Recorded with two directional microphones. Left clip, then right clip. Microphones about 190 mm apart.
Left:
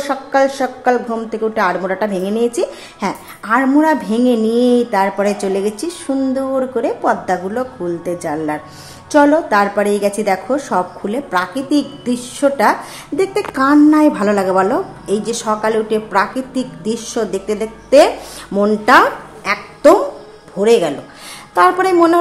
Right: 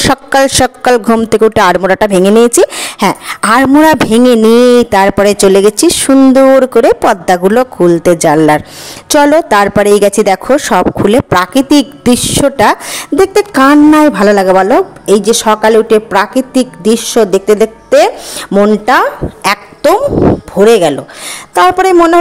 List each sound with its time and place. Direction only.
0.0 s a man's voice: 60° right (ahead or behind)
20.5 s a woman's voice: 45° right (ahead or behind)